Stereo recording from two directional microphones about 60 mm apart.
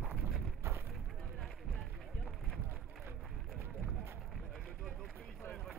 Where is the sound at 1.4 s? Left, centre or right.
Centre.